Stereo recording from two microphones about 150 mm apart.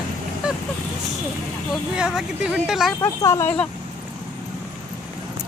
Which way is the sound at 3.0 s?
20° left (ahead or behind).